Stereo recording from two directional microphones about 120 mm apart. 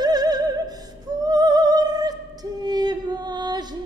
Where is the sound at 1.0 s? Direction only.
30° right (ahead or behind).